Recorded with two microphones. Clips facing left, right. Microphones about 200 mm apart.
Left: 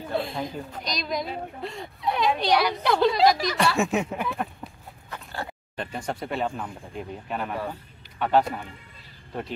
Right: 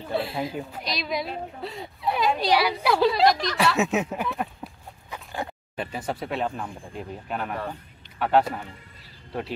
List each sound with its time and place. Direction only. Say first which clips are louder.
0.1 s a woman's voice: right 2 dB; 5° right (ahead or behind)
5.1 s dog: right 2 dB; 15° right (ahead or behind)
5.8 s a woman's voice: right 1 dB; 5° right (ahead or behind)